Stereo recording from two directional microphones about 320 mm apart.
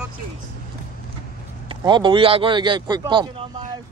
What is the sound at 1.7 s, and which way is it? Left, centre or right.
A man's voice, centre.